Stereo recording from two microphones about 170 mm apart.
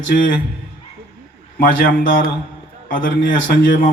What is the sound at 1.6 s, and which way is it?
A man's voice, 55° left (ahead or behind).